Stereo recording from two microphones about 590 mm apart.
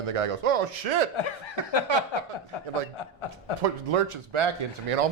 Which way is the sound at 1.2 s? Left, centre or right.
Left.